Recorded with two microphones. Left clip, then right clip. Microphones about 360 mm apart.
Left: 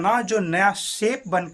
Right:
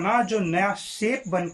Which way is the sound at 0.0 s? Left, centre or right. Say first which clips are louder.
Left 2 dB; left.